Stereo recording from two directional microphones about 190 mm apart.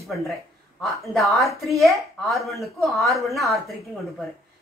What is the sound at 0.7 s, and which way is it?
A woman's voice, centre (ahead or behind).